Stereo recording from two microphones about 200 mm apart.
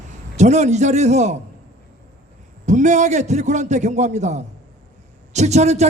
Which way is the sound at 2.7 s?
35° right (ahead or behind).